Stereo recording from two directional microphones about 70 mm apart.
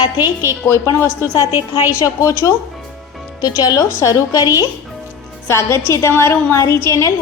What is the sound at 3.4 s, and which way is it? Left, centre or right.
A woman's voice, left.